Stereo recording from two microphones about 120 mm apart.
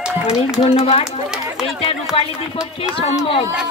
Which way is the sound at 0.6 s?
55° left (ahead or behind).